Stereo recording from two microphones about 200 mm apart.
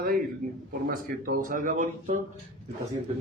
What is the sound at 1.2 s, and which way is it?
Speech, 45° right (ahead or behind).